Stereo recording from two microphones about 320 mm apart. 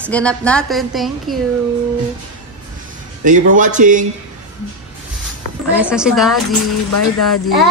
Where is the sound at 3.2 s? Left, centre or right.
Right.